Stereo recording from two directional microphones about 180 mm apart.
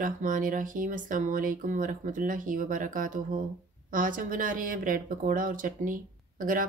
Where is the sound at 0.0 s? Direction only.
45° right (ahead or behind).